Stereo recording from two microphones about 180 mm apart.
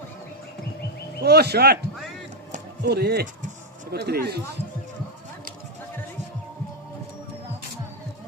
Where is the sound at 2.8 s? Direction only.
65° right (ahead or behind).